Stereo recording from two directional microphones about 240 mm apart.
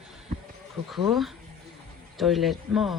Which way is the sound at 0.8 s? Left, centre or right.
Centre.